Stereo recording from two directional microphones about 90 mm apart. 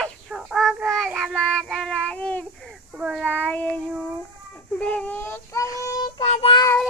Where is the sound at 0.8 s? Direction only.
Centre (ahead or behind).